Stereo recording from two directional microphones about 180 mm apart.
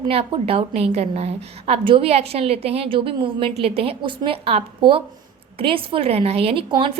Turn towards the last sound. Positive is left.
turn(degrees=-30)  # may be behind; listen again after turning